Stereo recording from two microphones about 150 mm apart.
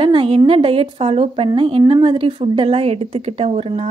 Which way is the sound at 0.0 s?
35° right (ahead or behind).